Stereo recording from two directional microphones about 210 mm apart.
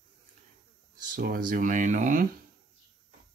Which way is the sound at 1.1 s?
45° right (ahead or behind).